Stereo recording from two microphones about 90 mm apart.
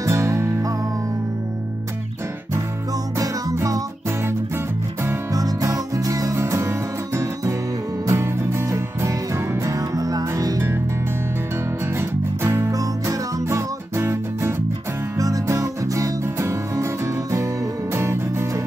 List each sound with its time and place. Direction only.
0.0 s music: 35° right (ahead or behind)
3.2 s music: 40° right (ahead or behind)
5.3 s music: 40° right (ahead or behind)
12.0 s music: 30° right (ahead or behind)
17.9 s music: 30° right (ahead or behind)